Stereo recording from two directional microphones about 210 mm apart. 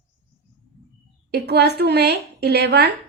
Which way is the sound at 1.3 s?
50° right (ahead or behind).